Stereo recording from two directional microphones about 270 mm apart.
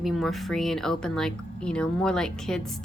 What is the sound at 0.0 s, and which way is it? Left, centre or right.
A woman's voice, centre.